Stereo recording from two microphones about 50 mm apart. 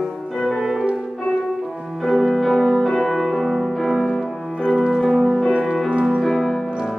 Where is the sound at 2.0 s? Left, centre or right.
Centre.